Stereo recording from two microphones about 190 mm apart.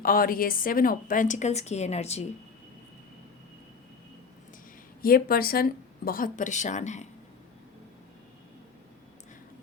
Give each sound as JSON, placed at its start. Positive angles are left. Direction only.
{"t": 0.0, "sound": "a woman's voice", "side_deg": 50}
{"t": 5.0, "sound": "a woman's voice", "side_deg": 50}